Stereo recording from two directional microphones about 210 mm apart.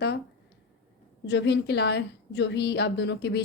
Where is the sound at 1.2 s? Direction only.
55° left (ahead or behind).